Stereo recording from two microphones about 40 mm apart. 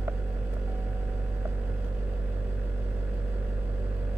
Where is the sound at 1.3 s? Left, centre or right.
Right.